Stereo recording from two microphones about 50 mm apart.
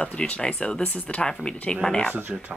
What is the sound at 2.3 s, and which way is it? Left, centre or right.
Speech, right.